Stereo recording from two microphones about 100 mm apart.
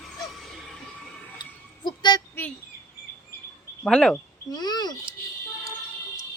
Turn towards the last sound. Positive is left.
turn(degrees=45)  # may be behind; listen again after turning